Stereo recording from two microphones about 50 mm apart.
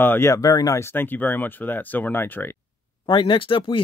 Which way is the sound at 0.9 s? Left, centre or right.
Left.